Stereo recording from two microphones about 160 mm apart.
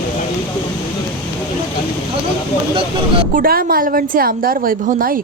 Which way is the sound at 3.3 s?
65° right (ahead or behind).